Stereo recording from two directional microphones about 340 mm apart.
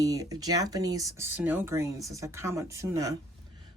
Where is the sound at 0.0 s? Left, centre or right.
Centre.